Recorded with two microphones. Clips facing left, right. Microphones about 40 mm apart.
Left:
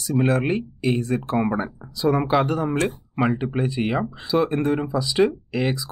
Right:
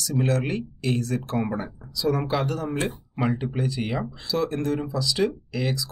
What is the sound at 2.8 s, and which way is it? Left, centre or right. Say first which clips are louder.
Speech: left 4 dB; centre.